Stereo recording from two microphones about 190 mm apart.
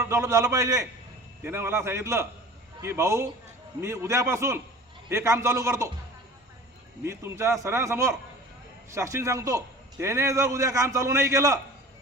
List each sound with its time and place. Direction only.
0.0 s a man's voice: 15° right (ahead or behind)
7.0 s a man's voice: 15° right (ahead or behind)